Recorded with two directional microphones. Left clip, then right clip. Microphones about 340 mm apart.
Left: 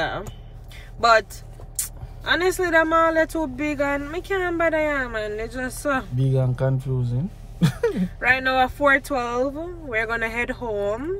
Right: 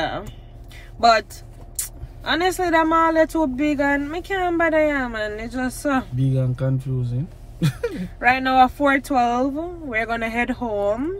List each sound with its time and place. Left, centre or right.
1.8 s speech: centre
6.1 s speech: centre
7.9 s speech: centre